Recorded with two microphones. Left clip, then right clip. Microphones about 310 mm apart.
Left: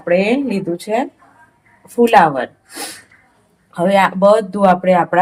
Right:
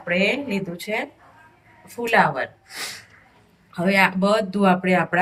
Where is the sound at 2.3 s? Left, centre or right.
Left.